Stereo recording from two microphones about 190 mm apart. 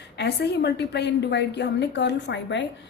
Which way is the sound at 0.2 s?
60° left (ahead or behind).